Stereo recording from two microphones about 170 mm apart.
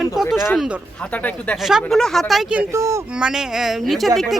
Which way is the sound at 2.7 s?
20° right (ahead or behind).